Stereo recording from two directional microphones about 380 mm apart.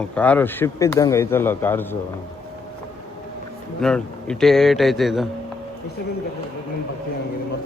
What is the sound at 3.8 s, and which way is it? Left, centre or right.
Speech, centre.